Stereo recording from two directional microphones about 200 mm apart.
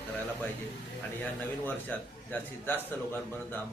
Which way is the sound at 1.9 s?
10° left (ahead or behind).